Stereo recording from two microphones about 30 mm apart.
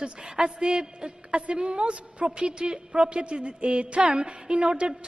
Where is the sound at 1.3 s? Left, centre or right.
Right.